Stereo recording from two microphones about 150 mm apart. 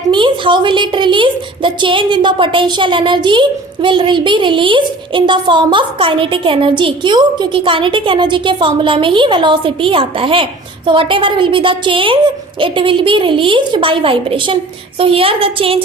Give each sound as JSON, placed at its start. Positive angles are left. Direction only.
{"t": 0.1, "sound": "a woman's voice", "side_deg": -30}